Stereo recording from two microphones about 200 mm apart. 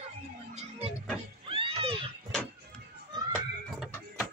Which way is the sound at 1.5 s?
25° right (ahead or behind).